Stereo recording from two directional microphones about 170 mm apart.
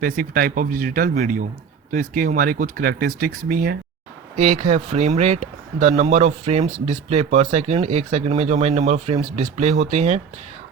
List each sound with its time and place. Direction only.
0.0 s speech: 55° right (ahead or behind)
4.4 s speech: 45° right (ahead or behind)